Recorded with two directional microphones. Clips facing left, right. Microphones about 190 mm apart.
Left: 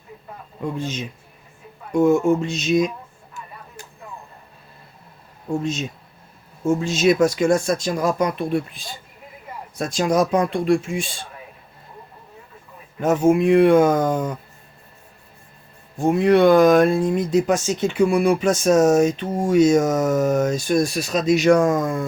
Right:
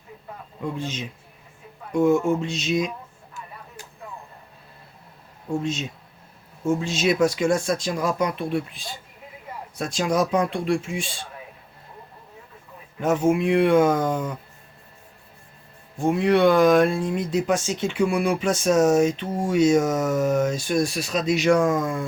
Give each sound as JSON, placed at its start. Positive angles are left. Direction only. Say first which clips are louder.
{"t": 0.8, "sound": "speech", "louder": "left 3 dB", "side_deg": 45}
{"t": 5.6, "sound": "speech", "louder": "left 2 dB", "side_deg": 40}
{"t": 13.0, "sound": "speech", "louder": "left 4 dB", "side_deg": 40}
{"t": 16.0, "sound": "speech", "louder": "left 4 dB", "side_deg": 45}